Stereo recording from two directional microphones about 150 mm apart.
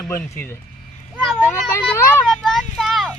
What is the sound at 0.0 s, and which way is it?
Speech, 15° left (ahead or behind).